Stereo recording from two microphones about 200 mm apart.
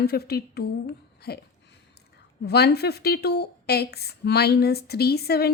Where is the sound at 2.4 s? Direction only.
55° left (ahead or behind).